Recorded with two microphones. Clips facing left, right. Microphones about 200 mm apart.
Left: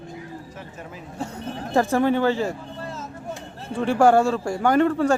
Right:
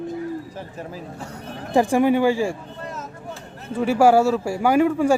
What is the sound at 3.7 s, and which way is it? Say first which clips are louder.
Speech: right 1 dB; 5° right (ahead or behind).